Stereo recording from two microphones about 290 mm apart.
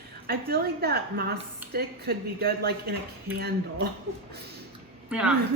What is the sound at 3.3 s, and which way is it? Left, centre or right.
Speech, centre.